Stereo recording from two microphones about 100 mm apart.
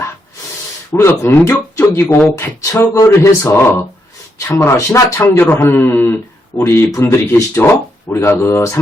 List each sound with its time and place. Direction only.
0.9 s speech: 25° left (ahead or behind)